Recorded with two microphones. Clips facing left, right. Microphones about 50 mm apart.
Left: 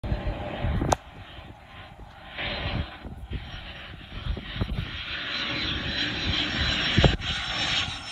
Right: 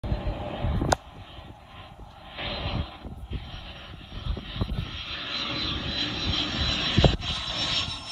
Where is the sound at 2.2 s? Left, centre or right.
Centre.